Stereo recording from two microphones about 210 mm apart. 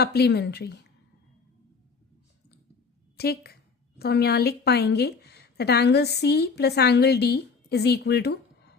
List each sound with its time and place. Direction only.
0.0 s a woman's voice: 50° left (ahead or behind)
3.2 s a woman's voice: 50° left (ahead or behind)